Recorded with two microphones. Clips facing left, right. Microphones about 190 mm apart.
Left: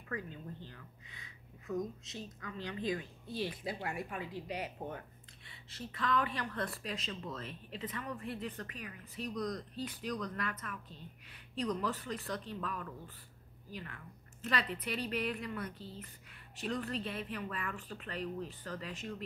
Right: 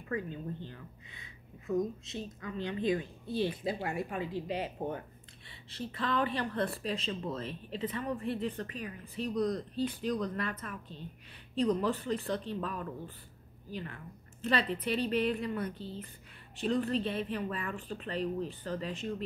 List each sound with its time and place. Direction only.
0.1 s speech: 25° right (ahead or behind)